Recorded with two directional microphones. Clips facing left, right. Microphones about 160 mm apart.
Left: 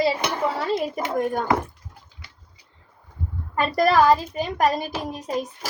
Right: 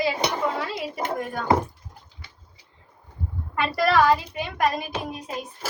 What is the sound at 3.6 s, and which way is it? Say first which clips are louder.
A woman's voice: left 2 dB; 40° left (ahead or behind).